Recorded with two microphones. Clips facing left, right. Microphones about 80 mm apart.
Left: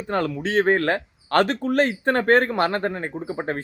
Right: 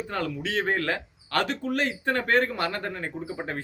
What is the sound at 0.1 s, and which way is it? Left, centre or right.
Speech, left.